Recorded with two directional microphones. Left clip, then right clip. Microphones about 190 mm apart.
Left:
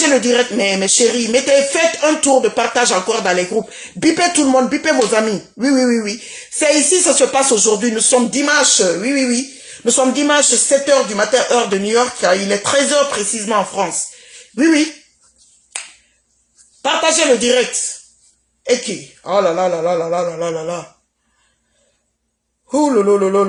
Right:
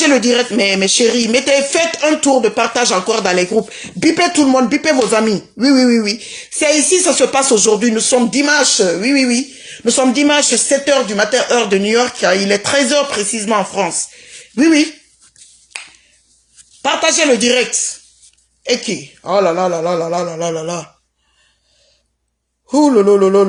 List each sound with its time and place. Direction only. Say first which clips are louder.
0.0 s speech: right 1 dB; 35° right (ahead or behind)
16.8 s speech: right 1 dB; 35° right (ahead or behind)
18.7 s speech: even; 35° right (ahead or behind)
22.7 s speech: right 3 dB; 45° right (ahead or behind)